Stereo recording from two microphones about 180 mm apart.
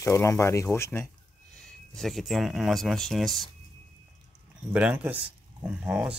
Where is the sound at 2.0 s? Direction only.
Centre (ahead or behind).